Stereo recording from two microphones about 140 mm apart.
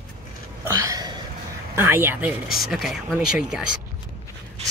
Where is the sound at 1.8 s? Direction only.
15° right (ahead or behind).